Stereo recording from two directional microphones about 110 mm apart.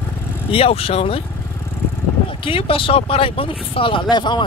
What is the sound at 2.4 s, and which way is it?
Speech, 55° left (ahead or behind).